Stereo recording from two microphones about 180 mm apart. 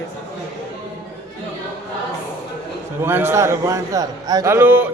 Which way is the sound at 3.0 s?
15° right (ahead or behind).